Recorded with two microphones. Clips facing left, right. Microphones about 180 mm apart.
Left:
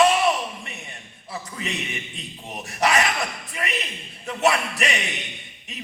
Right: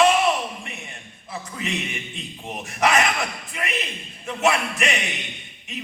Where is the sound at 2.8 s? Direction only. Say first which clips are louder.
Right 1 dB; 35° left (ahead or behind).